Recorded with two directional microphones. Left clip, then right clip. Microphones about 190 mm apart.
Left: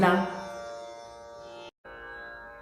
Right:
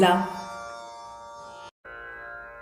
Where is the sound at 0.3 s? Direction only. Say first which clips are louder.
Right 2 dB; 15° right (ahead or behind).